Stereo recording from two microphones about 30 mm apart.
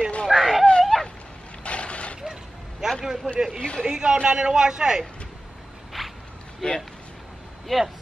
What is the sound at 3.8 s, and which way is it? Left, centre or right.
A man's voice, right.